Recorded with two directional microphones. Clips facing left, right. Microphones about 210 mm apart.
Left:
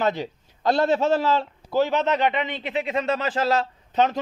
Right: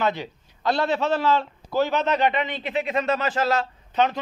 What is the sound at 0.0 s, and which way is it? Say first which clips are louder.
A man's voice: left 1 dB; 40° left (ahead or behind).